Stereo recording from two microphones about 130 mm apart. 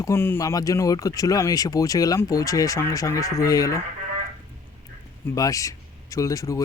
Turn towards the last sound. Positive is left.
turn(degrees=25)  # may be behind; listen again after turning